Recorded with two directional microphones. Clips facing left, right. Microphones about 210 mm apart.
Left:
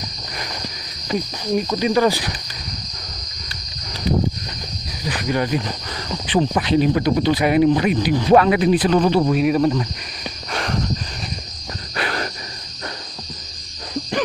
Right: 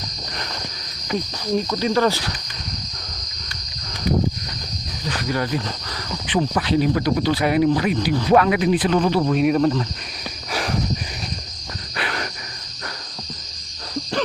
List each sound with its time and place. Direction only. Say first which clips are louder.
1.1 s speech: left 1 dB; 15° left (ahead or behind)
5.0 s cricket: left 2 dB; 15° left (ahead or behind)
6.5 s speech: left 1 dB; 20° left (ahead or behind)
8.3 s speech: left 3 dB; 30° left (ahead or behind)
9.2 s speech: left 1 dB; 5° left (ahead or behind)
10.5 s cricket: even; 5° right (ahead or behind)
12.0 s cricket: left 3 dB; 40° left (ahead or behind)